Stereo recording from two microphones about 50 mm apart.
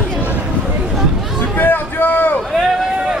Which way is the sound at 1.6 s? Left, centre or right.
Left.